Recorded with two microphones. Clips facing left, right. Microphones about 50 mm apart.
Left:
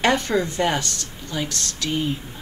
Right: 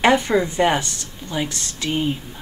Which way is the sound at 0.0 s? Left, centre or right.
Centre.